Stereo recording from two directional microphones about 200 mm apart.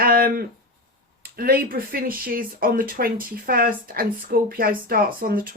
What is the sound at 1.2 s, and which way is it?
Speech, 50° right (ahead or behind).